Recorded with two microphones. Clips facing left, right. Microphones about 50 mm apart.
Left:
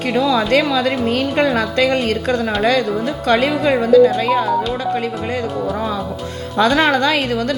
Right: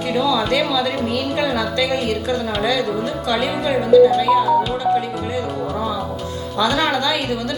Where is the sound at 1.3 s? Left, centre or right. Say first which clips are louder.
Left 4 dB; left.